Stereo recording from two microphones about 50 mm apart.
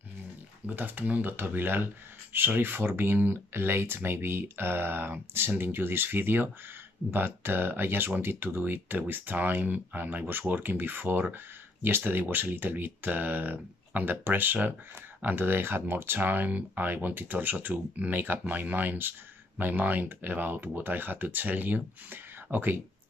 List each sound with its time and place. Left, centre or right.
0.7 s speech: right